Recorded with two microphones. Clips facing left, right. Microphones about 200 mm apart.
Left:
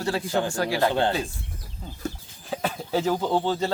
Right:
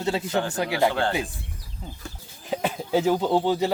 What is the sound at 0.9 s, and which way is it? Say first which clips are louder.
Speech: left 2 dB; 20° left (ahead or behind).